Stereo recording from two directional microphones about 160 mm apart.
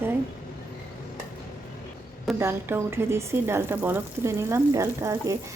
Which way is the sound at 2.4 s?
15° right (ahead or behind).